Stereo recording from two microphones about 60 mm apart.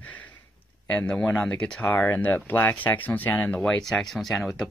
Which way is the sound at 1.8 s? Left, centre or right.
Left.